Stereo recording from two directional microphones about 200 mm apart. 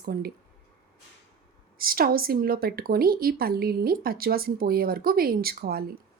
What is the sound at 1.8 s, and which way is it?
Speech, 45° right (ahead or behind).